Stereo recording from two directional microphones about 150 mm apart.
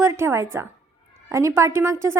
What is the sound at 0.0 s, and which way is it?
A woman's voice, 15° right (ahead or behind).